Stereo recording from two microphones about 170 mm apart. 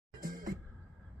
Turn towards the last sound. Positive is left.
turn(degrees=-55)  # may be behind; listen again after turning